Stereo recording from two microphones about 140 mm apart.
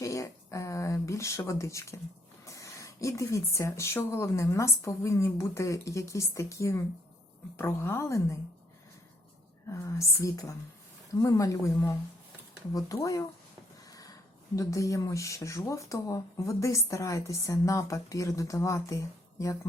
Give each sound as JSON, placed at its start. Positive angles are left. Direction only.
{"t": 0.0, "sound": "a woman's voice", "side_deg": 20}
{"t": 9.6, "sound": "speech", "side_deg": 20}